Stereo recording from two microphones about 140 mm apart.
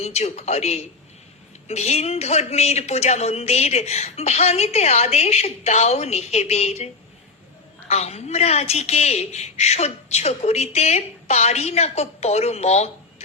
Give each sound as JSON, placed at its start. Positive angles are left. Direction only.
{"t": 0.0, "sound": "a woman's voice", "side_deg": 50}